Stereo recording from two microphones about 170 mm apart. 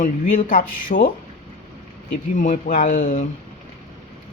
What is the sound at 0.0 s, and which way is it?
A man's voice, 50° left (ahead or behind).